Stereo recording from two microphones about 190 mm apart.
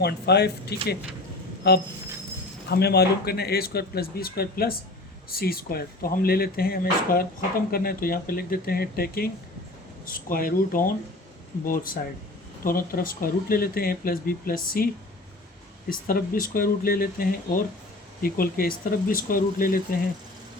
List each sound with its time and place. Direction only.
0.0 s speech: 60° left (ahead or behind)
15.9 s speech: 50° left (ahead or behind)